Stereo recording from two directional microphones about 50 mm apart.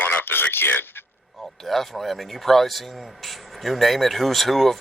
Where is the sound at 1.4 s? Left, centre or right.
Centre.